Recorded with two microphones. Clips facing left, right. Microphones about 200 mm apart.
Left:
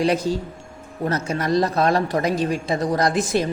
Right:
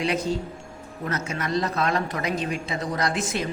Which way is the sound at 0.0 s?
35° left (ahead or behind).